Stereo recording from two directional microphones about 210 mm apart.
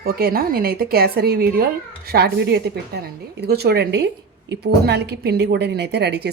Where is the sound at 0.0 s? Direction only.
45° right (ahead or behind).